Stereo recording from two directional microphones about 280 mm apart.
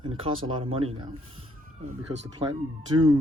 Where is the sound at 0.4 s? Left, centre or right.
Centre.